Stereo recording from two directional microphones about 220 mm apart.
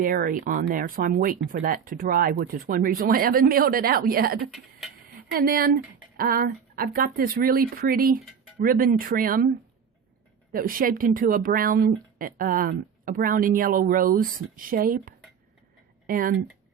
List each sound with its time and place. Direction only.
0.0 s speech: 40° right (ahead or behind)
10.5 s speech: 40° right (ahead or behind)